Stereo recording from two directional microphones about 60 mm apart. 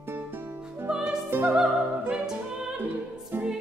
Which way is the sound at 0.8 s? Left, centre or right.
Centre.